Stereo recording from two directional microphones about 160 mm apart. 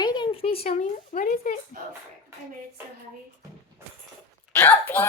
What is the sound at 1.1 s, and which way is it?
Speech, 55° left (ahead or behind).